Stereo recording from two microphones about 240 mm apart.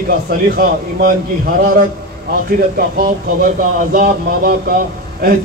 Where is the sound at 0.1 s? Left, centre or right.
Right.